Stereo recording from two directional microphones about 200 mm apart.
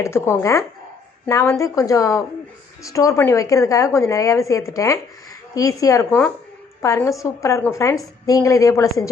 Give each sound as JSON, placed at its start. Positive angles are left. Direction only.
{"t": 0.0, "sound": "a woman's voice", "side_deg": 15}